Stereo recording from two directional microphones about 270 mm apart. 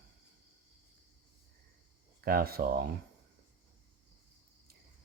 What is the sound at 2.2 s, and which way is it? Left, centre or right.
Speech, right.